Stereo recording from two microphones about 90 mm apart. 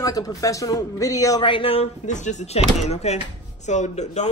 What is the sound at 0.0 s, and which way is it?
A man's voice, 40° left (ahead or behind).